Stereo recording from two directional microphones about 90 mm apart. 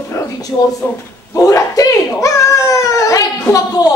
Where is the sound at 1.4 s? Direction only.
40° left (ahead or behind).